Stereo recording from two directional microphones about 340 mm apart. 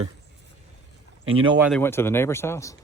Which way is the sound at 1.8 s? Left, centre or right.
Centre.